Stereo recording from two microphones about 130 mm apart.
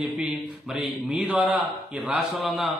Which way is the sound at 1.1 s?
10° right (ahead or behind).